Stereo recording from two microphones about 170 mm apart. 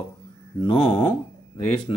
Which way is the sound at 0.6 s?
30° left (ahead or behind).